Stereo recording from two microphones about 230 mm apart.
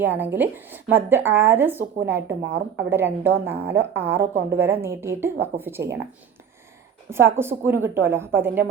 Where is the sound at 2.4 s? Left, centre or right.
Right.